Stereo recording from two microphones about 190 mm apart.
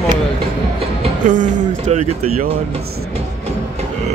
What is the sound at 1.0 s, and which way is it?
Speech, 40° right (ahead or behind).